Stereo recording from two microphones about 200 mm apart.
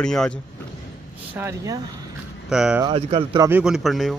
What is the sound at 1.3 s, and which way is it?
A man's voice, 15° right (ahead or behind).